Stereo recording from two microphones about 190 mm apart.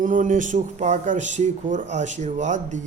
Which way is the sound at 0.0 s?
45° right (ahead or behind).